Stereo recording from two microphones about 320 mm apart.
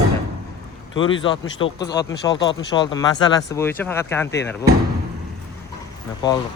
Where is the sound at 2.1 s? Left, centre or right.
Left.